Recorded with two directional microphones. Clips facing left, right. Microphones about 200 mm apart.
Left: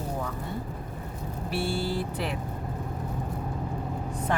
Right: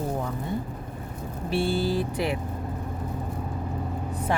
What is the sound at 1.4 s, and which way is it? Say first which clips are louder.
Speech: right 5 dB; 20° right (ahead or behind).